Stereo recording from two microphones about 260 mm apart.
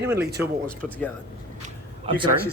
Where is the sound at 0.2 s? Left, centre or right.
Right.